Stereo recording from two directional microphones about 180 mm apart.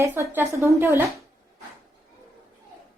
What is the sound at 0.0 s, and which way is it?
A woman's voice, 15° right (ahead or behind).